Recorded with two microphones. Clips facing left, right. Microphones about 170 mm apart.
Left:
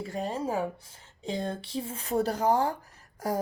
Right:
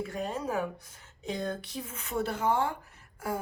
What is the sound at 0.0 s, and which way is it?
Speech, 30° left (ahead or behind).